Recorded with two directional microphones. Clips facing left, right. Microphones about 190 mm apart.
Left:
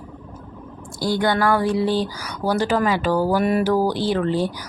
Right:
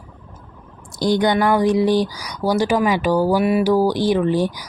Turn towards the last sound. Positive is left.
turn(degrees=-15)  # may be behind; listen again after turning